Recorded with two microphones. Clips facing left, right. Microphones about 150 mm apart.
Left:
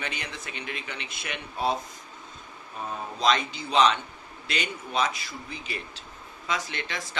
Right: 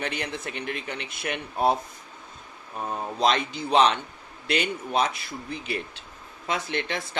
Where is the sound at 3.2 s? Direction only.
55° right (ahead or behind).